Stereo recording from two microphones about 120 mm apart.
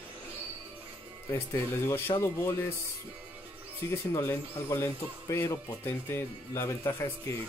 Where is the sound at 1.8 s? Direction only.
20° left (ahead or behind).